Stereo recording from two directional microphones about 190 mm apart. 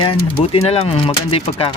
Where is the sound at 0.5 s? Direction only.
30° left (ahead or behind).